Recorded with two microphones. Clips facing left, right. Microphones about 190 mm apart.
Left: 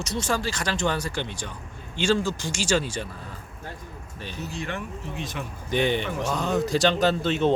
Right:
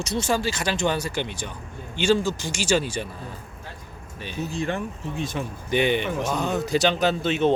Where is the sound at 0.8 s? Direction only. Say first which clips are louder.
Right 2 dB; 20° right (ahead or behind).